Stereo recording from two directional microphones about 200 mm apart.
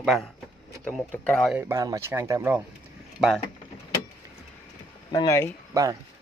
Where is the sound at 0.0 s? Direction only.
Centre (ahead or behind).